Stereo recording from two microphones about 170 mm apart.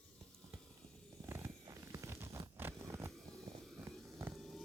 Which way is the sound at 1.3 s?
15° right (ahead or behind).